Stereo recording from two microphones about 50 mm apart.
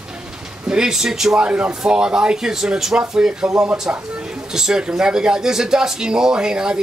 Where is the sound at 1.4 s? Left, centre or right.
Right.